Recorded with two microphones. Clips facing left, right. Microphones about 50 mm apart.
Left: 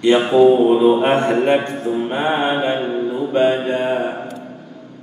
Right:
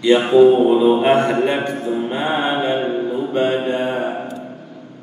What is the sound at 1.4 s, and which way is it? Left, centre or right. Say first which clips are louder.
A man's voice: left 2 dB; left.